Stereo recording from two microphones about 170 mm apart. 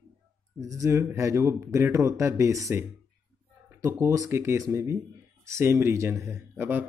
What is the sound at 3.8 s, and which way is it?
A man's voice, 15° right (ahead or behind).